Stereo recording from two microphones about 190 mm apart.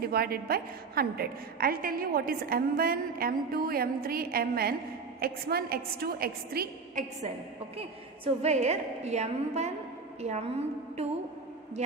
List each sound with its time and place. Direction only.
0.0 s a woman's voice: 55° right (ahead or behind)
7.8 s a woman's voice: 35° right (ahead or behind)